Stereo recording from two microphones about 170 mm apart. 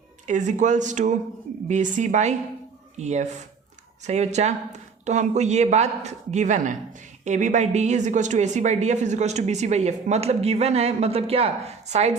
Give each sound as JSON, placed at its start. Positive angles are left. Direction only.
{"t": 0.3, "sound": "a woman's voice", "side_deg": -45}